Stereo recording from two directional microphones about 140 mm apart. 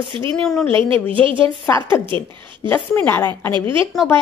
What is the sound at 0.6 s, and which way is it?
A woman's voice, 40° right (ahead or behind).